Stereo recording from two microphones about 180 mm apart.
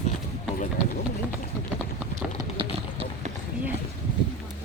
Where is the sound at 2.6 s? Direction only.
30° right (ahead or behind).